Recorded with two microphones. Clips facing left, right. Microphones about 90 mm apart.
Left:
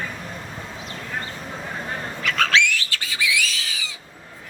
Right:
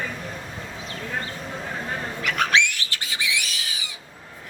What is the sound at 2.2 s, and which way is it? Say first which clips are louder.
Bird: left 1 dB; 20° right (ahead or behind).